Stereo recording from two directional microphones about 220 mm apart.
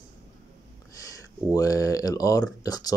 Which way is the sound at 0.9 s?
15° left (ahead or behind).